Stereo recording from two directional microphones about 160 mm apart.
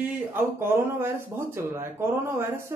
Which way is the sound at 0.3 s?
15° right (ahead or behind).